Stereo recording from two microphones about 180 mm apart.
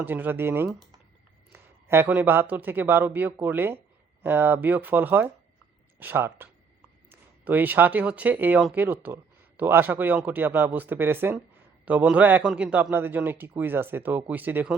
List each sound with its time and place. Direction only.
0.0 s speech: 10° right (ahead or behind)